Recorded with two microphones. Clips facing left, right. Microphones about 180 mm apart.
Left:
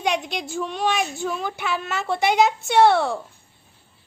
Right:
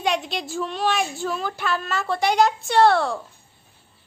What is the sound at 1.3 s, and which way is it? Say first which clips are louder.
Speech: right 1 dB; 15° left (ahead or behind).